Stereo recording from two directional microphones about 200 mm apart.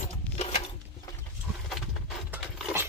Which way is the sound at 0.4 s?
30° left (ahead or behind).